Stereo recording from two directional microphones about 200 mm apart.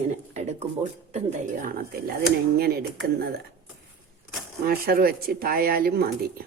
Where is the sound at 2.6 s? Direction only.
50° right (ahead or behind).